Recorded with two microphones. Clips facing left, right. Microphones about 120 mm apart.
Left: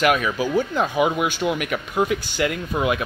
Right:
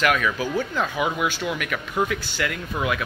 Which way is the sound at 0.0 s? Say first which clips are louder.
Left 2 dB; 15° left (ahead or behind).